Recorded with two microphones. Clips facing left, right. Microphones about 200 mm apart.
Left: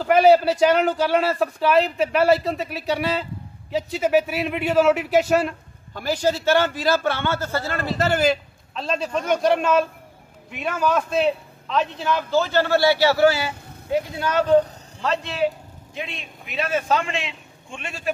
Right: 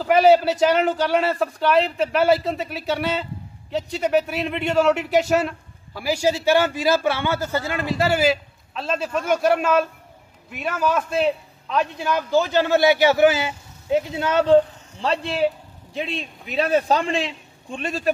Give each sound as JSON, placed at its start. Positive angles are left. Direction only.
{"t": 0.0, "sound": "a man's voice", "side_deg": 0}